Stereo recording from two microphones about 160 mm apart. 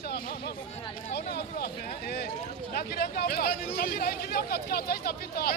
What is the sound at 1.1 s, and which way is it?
Speech, 75° left (ahead or behind).